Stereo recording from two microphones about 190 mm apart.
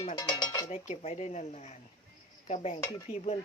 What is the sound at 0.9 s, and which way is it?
Speech, 35° left (ahead or behind).